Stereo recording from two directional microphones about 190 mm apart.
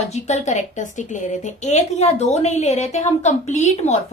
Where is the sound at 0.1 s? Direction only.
35° left (ahead or behind).